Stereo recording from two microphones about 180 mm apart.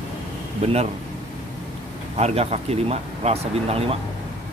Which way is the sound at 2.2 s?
35° right (ahead or behind).